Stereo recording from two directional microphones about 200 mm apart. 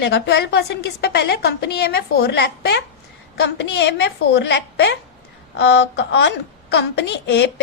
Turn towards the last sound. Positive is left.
turn(degrees=55)  # may be behind; listen again after turning